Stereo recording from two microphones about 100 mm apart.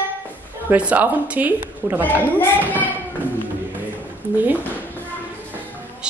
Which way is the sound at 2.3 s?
20° left (ahead or behind).